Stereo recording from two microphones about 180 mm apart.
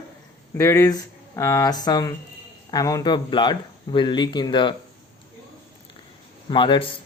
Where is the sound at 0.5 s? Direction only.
15° left (ahead or behind).